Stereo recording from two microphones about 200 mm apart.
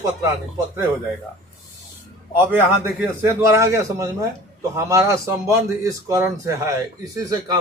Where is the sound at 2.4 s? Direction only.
10° right (ahead or behind).